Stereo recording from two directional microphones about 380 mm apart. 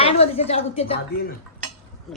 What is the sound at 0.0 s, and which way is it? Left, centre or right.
Speech, centre.